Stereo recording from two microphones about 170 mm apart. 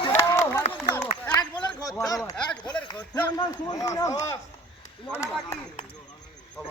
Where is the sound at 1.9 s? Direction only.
20° left (ahead or behind).